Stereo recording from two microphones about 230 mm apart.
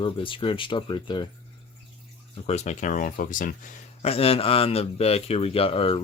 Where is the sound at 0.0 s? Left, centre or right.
Left.